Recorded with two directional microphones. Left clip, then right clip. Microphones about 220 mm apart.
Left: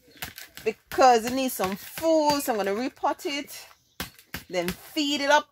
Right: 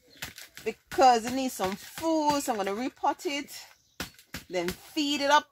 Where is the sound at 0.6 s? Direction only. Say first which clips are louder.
Left 2 dB; 30° left (ahead or behind).